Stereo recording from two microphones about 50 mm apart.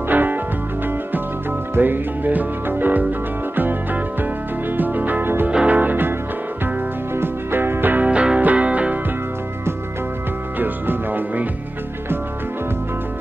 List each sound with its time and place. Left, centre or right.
0.1 s music: right
1.8 s music: right
7.2 s music: right
8.1 s music: right
10.6 s music: right